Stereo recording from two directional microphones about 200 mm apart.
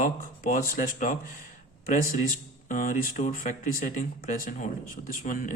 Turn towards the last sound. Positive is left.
turn(degrees=40)  # may be behind; listen again after turning